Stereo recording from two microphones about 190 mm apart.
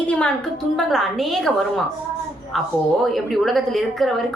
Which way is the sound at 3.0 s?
Centre (ahead or behind).